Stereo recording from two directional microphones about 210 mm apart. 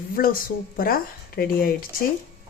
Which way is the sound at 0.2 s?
40° left (ahead or behind).